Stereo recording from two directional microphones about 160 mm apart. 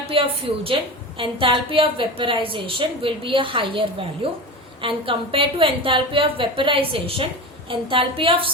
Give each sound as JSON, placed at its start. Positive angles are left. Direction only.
{"t": 0.1, "sound": "a woman's voice", "side_deg": -35}